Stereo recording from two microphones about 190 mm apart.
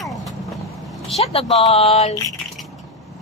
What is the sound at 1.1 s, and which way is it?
Speech, 30° left (ahead or behind).